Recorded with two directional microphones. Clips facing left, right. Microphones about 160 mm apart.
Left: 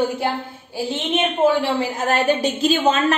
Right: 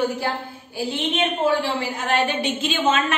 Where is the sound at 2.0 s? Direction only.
40° left (ahead or behind).